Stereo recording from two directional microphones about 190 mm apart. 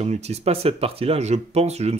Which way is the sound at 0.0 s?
35° right (ahead or behind).